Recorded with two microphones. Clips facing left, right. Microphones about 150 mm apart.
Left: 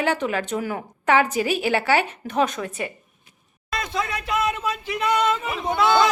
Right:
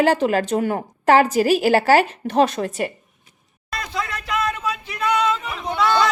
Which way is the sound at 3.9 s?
25° left (ahead or behind).